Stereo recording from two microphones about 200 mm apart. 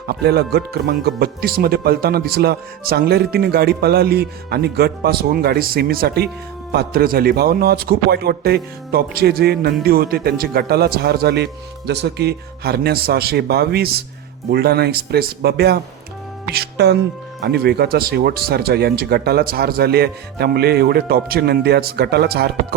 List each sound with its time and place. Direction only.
0.1 s speech: 55° right (ahead or behind)